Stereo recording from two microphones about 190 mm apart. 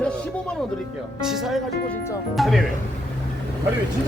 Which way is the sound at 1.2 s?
Centre (ahead or behind).